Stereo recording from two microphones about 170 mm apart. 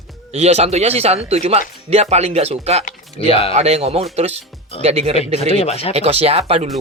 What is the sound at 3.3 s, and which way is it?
Speech, 35° left (ahead or behind).